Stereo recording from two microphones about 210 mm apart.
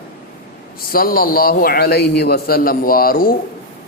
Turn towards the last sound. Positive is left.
turn(degrees=45)  # may be behind; listen again after turning